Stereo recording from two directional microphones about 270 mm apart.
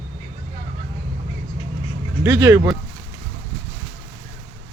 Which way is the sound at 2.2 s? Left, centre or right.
Centre.